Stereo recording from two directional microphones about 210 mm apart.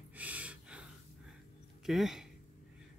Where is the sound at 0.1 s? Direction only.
5° right (ahead or behind).